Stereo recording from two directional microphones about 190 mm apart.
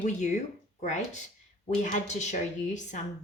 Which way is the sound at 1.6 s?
40° left (ahead or behind).